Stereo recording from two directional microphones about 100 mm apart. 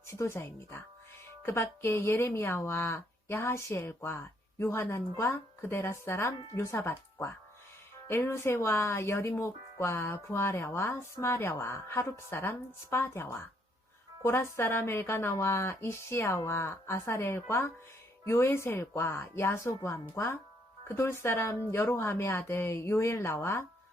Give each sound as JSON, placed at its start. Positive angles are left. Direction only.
{"t": 0.1, "sound": "speech", "side_deg": 25}